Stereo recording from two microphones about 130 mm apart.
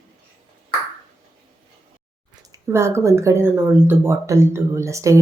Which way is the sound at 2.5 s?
20° right (ahead or behind).